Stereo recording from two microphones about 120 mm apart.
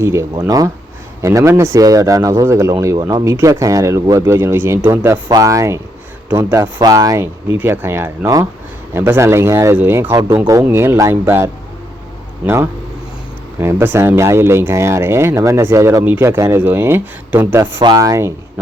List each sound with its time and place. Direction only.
0.0 s speech: 25° right (ahead or behind)
13.6 s speech: 20° right (ahead or behind)
17.7 s speech: 35° right (ahead or behind)